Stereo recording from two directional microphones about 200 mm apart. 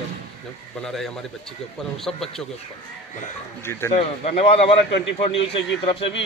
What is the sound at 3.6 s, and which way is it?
Speech, 10° left (ahead or behind).